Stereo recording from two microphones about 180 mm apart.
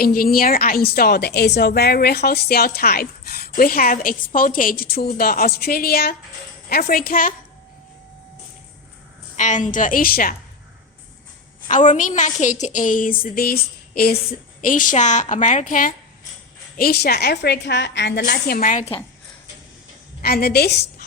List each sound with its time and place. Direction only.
0.0 s a woman's voice: 55° left (ahead or behind)
9.4 s a woman's voice: 45° left (ahead or behind)
11.7 s a woman's voice: 45° left (ahead or behind)
14.6 s a woman's voice: 45° left (ahead or behind); by 18.2 s 75° left (ahead or behind)
18.2 s a woman's voice: 60° left (ahead or behind)
20.2 s a woman's voice: 60° left (ahead or behind)